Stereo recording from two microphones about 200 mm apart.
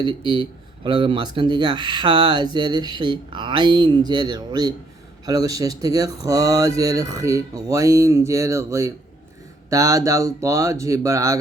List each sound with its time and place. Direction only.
0.0 s speech: 25° right (ahead or behind)